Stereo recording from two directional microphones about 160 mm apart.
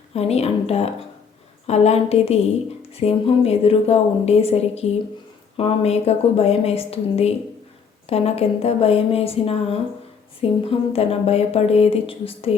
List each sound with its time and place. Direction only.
0.1 s a woman's voice: 40° left (ahead or behind)